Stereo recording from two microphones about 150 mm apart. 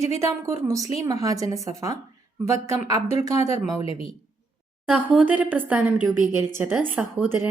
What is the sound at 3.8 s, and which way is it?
Speech, 40° left (ahead or behind).